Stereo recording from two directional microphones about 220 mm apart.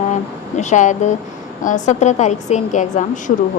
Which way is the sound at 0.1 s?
35° left (ahead or behind).